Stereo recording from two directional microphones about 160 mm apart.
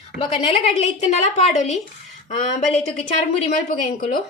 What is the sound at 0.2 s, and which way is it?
A woman's voice, 35° left (ahead or behind).